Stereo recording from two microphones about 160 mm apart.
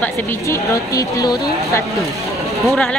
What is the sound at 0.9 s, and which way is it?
Speech, 20° left (ahead or behind).